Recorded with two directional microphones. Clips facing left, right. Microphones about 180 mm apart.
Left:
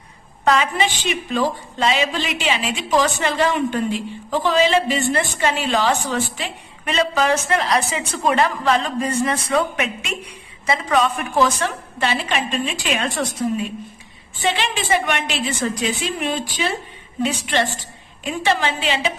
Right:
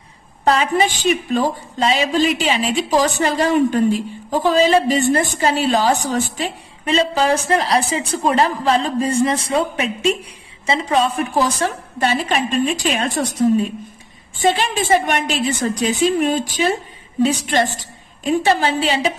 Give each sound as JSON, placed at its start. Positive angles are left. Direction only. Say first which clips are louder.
{"t": 0.5, "sound": "a woman's voice", "louder": "right 2 dB", "side_deg": -40}